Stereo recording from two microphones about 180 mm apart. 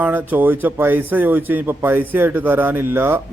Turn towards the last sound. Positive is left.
turn(degrees=-15)  # may be behind; listen again after turning